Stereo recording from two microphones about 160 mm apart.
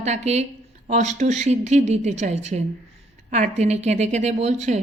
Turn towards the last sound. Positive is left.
turn(degrees=-45)  # may be behind; listen again after turning